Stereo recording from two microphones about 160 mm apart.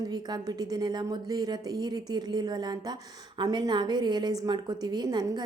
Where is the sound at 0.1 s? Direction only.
25° right (ahead or behind).